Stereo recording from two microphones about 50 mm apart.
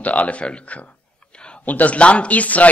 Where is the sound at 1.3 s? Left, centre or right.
Centre.